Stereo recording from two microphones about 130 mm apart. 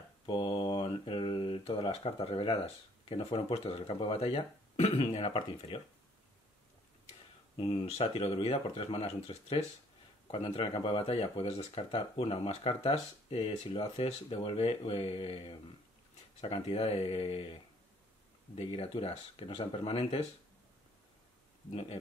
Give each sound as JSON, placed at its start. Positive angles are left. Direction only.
{"t": 0.3, "sound": "speech", "side_deg": 45}
{"t": 7.5, "sound": "speech", "side_deg": 45}